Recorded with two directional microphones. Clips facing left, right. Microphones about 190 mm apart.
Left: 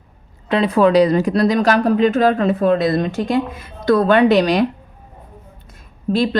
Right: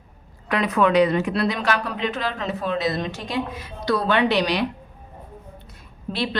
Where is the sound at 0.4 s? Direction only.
25° left (ahead or behind); by 4.6 s 45° left (ahead or behind).